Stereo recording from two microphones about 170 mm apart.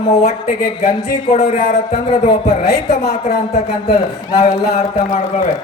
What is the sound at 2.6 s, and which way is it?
Speech, 70° left (ahead or behind).